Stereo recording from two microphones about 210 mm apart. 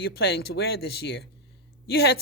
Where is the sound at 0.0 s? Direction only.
50° left (ahead or behind).